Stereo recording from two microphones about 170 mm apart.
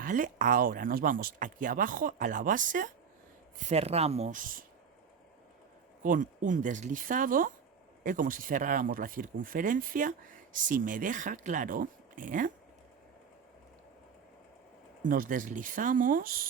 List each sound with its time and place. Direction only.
0.0 s speech: 50° right (ahead or behind)
3.6 s speech: 40° right (ahead or behind)
6.0 s speech: 50° right (ahead or behind)
15.0 s speech: 55° right (ahead or behind)